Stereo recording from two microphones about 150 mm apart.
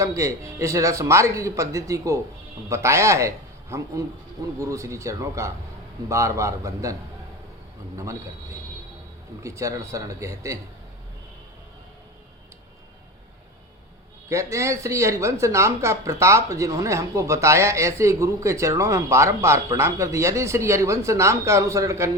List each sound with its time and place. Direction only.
0.0 s speech: 20° right (ahead or behind)
9.4 s speech: 20° right (ahead or behind)
14.3 s speech: 20° right (ahead or behind)